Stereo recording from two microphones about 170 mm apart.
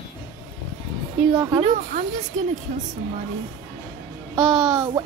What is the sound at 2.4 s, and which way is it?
Speech, 45° right (ahead or behind).